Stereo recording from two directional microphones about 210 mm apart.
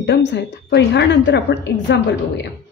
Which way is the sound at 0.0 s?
55° left (ahead or behind).